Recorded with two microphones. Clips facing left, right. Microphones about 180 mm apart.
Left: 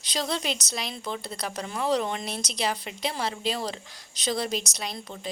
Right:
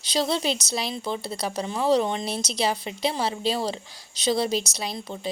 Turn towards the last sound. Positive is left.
turn(degrees=-30)  # may be behind; listen again after turning